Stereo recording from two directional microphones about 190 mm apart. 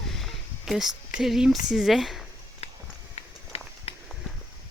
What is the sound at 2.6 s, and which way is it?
Walk, 35° left (ahead or behind).